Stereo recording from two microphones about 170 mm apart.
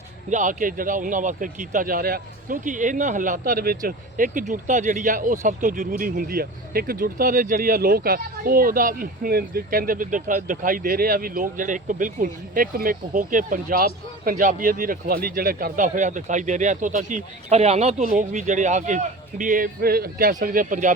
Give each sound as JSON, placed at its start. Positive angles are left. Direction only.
{"t": 0.3, "sound": "a man's voice", "side_deg": -50}